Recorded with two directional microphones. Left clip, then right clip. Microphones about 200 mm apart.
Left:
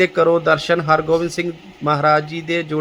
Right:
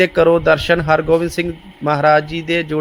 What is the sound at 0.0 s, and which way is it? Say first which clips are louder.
A man's voice: right 3 dB; 10° right (ahead or behind).